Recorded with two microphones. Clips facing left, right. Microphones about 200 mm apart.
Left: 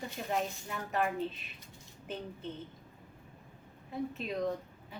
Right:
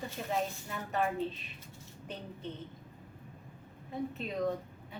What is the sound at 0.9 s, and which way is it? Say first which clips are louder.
Speech: even; centre (ahead or behind).